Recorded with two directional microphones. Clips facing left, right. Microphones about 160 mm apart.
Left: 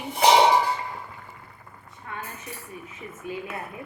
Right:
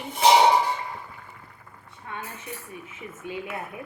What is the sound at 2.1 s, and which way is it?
Speech, 20° right (ahead or behind).